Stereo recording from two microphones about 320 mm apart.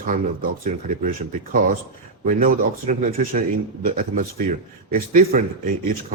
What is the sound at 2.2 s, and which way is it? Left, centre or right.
Speech, right.